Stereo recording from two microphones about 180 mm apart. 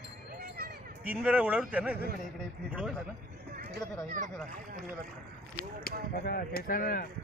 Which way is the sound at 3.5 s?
55° right (ahead or behind).